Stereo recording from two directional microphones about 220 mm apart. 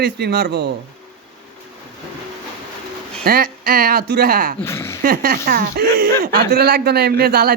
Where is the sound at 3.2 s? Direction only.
40° right (ahead or behind).